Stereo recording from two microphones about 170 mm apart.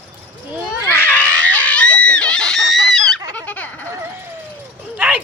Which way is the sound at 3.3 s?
10° left (ahead or behind).